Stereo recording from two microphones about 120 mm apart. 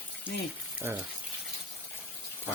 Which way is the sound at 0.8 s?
15° right (ahead or behind).